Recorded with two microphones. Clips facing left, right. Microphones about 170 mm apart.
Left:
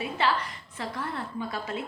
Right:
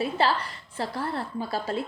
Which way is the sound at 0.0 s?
35° right (ahead or behind).